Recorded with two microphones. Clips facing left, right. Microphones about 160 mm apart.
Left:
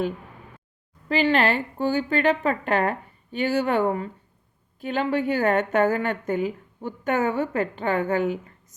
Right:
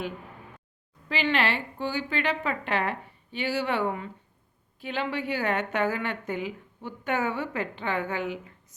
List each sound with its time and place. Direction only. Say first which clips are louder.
1.0 s a woman's voice: left 6 dB; 40° left (ahead or behind)